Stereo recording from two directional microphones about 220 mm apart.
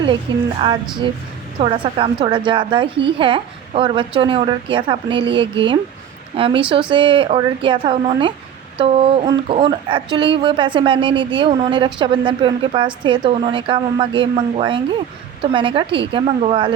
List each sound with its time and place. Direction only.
1.5 s a woman's voice: 20° right (ahead or behind)